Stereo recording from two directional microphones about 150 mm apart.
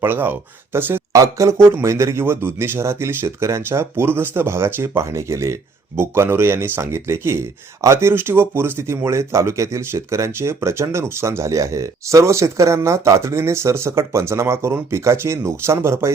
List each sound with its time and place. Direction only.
0.0 s speech: 15° right (ahead or behind)